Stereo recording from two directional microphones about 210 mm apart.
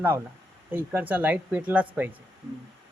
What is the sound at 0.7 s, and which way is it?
A man's voice, 10° right (ahead or behind).